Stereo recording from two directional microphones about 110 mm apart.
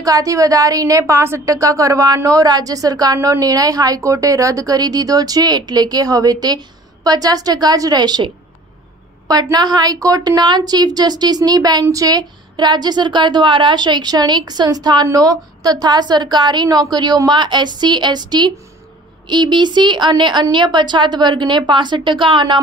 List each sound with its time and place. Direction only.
0.0 s a woman's voice: 30° right (ahead or behind)
9.3 s a woman's voice: 35° right (ahead or behind)